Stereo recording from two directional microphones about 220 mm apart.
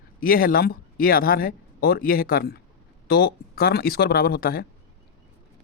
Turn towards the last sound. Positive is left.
turn(degrees=40)  # may be behind; listen again after turning